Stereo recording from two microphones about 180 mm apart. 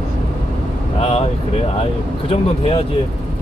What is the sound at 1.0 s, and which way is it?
Speech, 35° left (ahead or behind).